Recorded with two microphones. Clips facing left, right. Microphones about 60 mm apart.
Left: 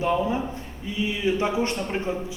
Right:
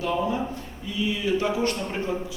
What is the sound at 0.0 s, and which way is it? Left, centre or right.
A man's voice, left.